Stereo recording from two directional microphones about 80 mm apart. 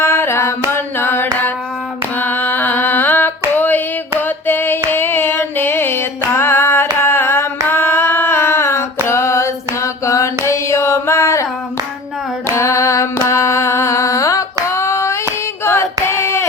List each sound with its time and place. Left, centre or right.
0.0 s a sound: left
0.7 s carnatic music: left
2.1 s a sound: left
4.9 s music: left
7.0 s carnatic music: left
7.7 s female singing: left
10.4 s carnatic music: left
12.5 s music: left
14.7 s female singing: left
15.2 s hands: left